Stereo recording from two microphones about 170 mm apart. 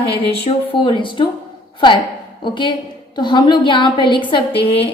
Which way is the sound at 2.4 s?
25° left (ahead or behind).